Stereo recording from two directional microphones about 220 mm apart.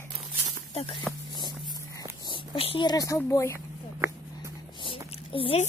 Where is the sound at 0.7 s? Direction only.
25° left (ahead or behind).